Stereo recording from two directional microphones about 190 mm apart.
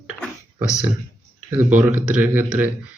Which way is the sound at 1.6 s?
10° right (ahead or behind).